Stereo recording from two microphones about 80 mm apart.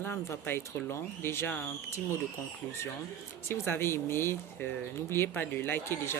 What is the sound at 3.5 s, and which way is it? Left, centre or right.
Speech, left.